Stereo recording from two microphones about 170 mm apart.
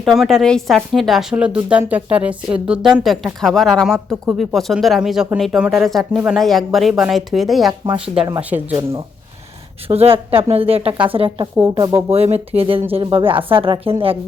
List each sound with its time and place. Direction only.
0.0 s speech: centre (ahead or behind)
9.9 s speech: 35° right (ahead or behind)
11.8 s speech: 15° right (ahead or behind)
12.1 s speech: 35° right (ahead or behind)